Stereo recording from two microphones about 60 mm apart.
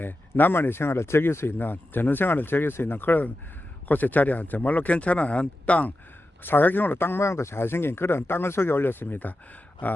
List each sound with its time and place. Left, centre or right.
0.0 s speech: left
6.4 s speech: left